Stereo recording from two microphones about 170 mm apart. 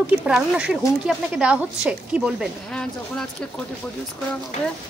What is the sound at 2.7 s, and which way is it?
Speech, 5° left (ahead or behind).